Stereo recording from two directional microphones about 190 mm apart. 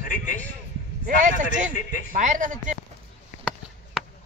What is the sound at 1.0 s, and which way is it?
Speech, 45° right (ahead or behind).